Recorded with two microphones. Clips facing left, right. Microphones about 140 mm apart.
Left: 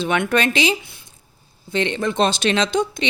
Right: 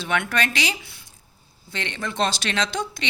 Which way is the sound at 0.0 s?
20° left (ahead or behind).